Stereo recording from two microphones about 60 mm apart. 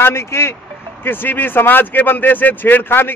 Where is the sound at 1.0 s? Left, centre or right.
Left.